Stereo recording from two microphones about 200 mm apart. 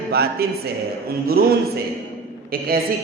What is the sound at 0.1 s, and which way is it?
A woman's voice, 50° right (ahead or behind).